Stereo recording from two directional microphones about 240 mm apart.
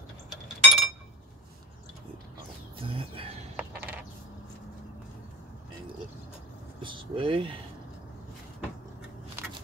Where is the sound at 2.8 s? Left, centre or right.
Right.